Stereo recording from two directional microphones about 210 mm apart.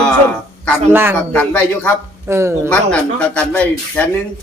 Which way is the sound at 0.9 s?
10° right (ahead or behind).